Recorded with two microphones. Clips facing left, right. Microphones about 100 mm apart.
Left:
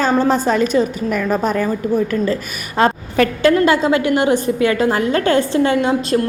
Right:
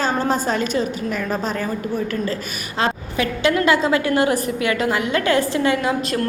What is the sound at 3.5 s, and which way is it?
A woman's voice, 30° left (ahead or behind).